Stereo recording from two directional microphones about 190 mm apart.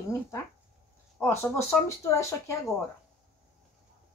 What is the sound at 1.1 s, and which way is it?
Speech, 10° left (ahead or behind).